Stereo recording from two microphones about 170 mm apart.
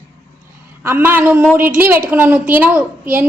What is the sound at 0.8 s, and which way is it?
A woman's voice, 10° right (ahead or behind).